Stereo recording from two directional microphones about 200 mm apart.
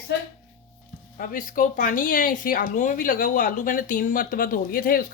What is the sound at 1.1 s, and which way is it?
Speech, 45° left (ahead or behind).